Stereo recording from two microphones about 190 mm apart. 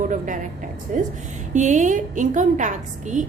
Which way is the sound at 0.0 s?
40° right (ahead or behind).